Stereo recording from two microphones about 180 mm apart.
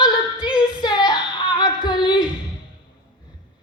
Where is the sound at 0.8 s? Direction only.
25° left (ahead or behind).